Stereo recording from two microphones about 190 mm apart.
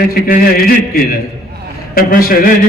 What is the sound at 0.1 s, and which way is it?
Speech, 50° left (ahead or behind).